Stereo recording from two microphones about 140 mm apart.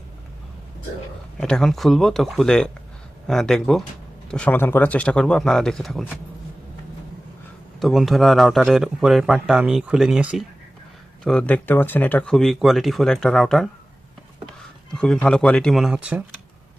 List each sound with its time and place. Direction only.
1.4 s a man's voice: 5° left (ahead or behind)
7.8 s a man's voice: centre (ahead or behind)
11.2 s a man's voice: 5° left (ahead or behind)
14.9 s a man's voice: 5° left (ahead or behind)